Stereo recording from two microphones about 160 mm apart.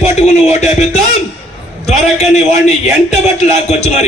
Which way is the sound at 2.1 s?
45° left (ahead or behind).